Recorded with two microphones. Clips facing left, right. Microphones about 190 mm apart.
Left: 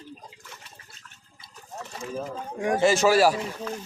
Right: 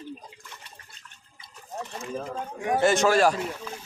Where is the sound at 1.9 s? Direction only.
Centre (ahead or behind).